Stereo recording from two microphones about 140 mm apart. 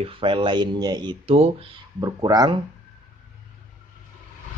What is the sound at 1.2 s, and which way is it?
Speech, 45° right (ahead or behind).